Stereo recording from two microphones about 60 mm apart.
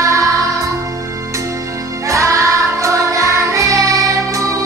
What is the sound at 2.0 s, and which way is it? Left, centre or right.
Music, right.